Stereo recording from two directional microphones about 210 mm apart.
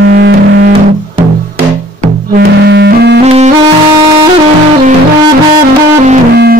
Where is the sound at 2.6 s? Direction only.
50° right (ahead or behind).